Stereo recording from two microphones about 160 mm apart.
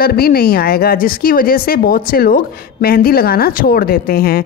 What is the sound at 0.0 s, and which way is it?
A woman's voice, 70° left (ahead or behind).